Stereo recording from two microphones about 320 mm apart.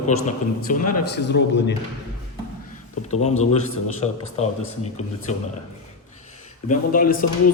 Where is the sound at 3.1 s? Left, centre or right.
Left.